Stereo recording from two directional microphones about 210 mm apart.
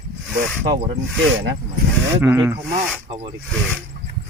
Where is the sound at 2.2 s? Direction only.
10° right (ahead or behind).